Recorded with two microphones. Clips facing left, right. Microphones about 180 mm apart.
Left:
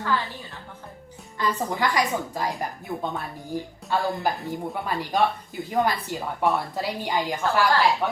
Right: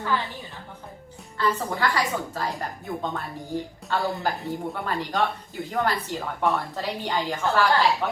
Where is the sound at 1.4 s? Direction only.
15° left (ahead or behind).